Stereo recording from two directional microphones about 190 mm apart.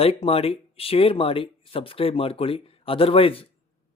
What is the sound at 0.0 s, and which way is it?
Speech, 30° left (ahead or behind).